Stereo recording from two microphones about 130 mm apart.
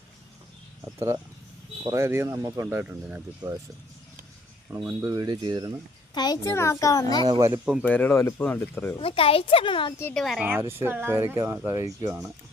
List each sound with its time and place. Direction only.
0.9 s speech: 20° right (ahead or behind)
3.4 s speech: 35° right (ahead or behind)
4.9 s speech: 20° right (ahead or behind)
6.1 s a child's voice: 30° left (ahead or behind)
7.3 s speech: 25° right (ahead or behind)
7.5 s speech: 10° right (ahead or behind)
7.8 s speech: 10° left (ahead or behind)
9.0 s a child's voice: 45° left (ahead or behind)
10.2 s speech: centre (ahead or behind)
10.4 s speech: 20° right (ahead or behind)